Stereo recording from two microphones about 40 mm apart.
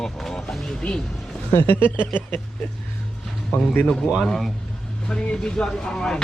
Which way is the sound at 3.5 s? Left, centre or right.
Left.